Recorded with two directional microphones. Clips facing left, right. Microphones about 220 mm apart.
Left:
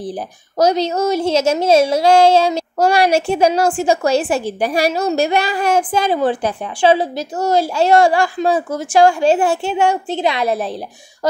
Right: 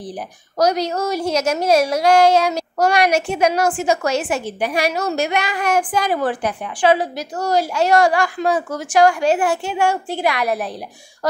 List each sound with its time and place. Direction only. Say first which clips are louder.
0.6 s a woman's voice: left 3 dB; 25° left (ahead or behind)